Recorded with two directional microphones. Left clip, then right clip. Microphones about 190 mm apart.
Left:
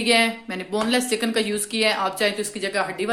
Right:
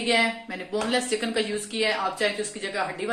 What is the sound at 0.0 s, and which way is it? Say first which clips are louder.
Speech: left 3 dB; 40° left (ahead or behind).